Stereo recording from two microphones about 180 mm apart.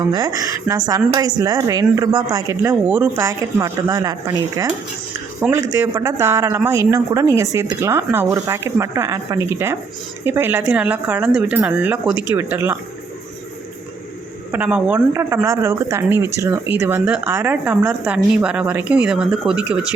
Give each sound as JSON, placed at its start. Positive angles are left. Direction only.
{"t": 0.1, "sound": "speech", "side_deg": -20}
{"t": 14.5, "sound": "speech", "side_deg": -10}